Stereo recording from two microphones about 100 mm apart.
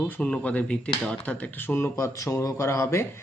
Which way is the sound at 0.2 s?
10° left (ahead or behind).